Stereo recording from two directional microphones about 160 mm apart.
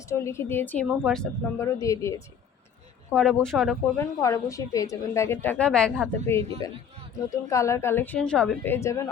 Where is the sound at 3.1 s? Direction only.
5° left (ahead or behind).